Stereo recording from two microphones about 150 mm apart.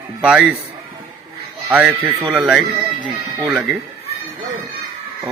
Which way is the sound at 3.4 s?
15° right (ahead or behind).